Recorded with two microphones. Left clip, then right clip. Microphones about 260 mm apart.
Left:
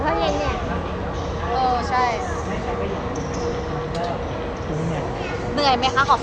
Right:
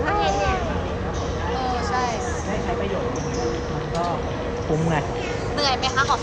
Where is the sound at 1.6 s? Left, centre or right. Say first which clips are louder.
Left 5 dB; centre.